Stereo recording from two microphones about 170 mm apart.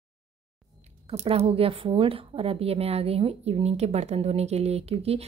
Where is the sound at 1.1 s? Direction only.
40° right (ahead or behind).